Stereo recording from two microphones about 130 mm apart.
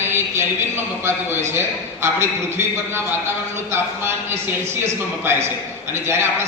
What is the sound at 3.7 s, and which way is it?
A man's voice, 20° right (ahead or behind).